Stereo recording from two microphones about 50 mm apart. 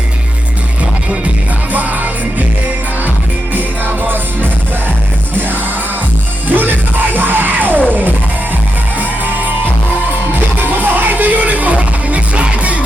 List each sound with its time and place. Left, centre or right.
1.7 s music: right
3.5 s music: right
6.5 s music: right
9.0 s music: right
10.8 s music: right